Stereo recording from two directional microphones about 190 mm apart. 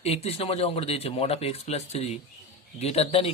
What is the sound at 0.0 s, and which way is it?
A man's voice, 30° left (ahead or behind).